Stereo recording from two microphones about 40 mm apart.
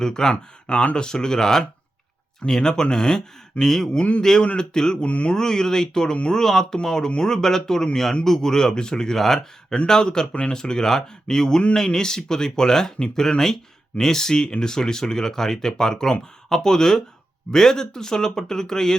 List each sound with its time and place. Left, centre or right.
0.0 s speech: centre
4.5 s a sound: centre
5.0 s speech: left
5.3 s speech: centre